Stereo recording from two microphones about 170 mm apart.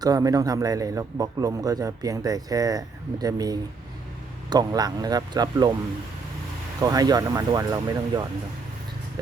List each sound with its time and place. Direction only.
0.0 s a man's voice: 20° right (ahead or behind)
6.8 s a man's voice: 25° right (ahead or behind)